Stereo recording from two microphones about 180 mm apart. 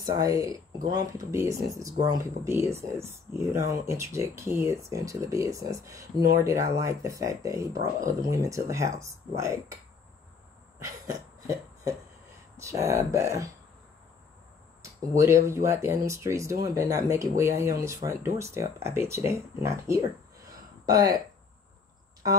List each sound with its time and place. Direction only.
0.0 s speech: 20° right (ahead or behind)
10.8 s cough: 20° right (ahead or behind)
12.5 s speech: 15° right (ahead or behind)
14.8 s speech: 15° right (ahead or behind)
20.4 s a sound: 20° right (ahead or behind)